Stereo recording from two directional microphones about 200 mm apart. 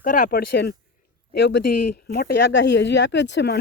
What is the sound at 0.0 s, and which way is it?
Speech, 45° left (ahead or behind).